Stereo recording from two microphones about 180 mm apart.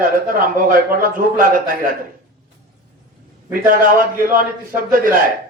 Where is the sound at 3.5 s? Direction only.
50° right (ahead or behind).